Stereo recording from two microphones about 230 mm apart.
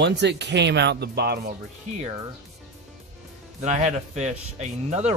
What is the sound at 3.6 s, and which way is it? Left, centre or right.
Speech, right.